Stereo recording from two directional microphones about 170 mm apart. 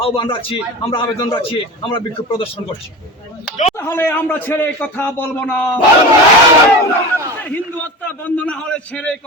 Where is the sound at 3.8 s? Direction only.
10° left (ahead or behind).